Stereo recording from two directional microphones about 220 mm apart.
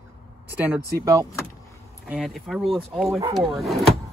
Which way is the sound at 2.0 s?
Centre (ahead or behind).